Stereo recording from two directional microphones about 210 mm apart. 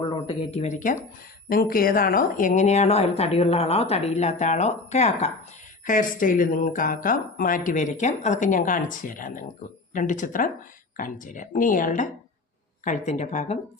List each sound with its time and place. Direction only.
0.1 s speech: 30° left (ahead or behind)